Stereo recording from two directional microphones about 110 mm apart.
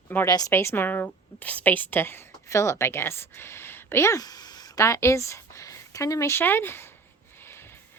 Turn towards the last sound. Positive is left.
turn(degrees=20)  # may be behind; listen again after turning